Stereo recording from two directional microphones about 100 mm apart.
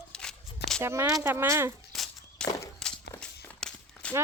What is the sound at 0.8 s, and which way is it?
Speech, 25° right (ahead or behind).